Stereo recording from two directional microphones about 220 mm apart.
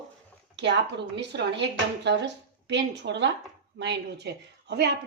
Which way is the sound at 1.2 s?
50° right (ahead or behind).